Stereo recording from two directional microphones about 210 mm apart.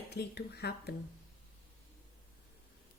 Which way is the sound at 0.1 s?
50° left (ahead or behind).